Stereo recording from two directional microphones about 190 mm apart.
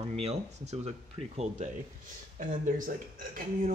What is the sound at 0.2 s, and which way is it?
Speech, 35° right (ahead or behind).